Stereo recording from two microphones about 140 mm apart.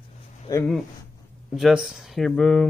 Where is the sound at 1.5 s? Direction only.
5° right (ahead or behind).